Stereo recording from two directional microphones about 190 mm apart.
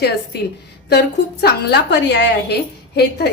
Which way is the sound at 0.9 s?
60° left (ahead or behind).